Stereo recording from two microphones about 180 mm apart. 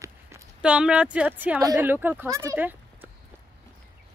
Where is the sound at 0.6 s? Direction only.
5° right (ahead or behind).